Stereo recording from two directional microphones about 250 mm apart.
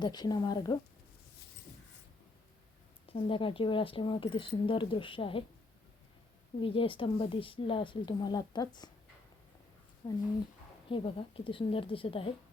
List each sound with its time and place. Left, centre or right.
0.0 s speech: centre
3.1 s speech: left
6.6 s speech: left
10.0 s speech: centre